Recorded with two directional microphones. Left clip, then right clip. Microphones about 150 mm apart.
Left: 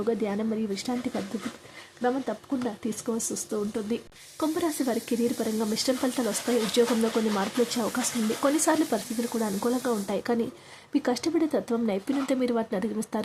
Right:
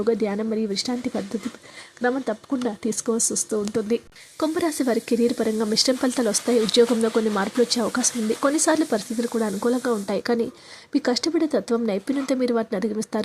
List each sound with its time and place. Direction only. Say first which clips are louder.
0.0 s speech: right 5 dB; 25° right (ahead or behind)